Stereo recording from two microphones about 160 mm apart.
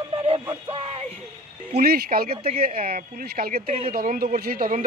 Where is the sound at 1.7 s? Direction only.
70° right (ahead or behind).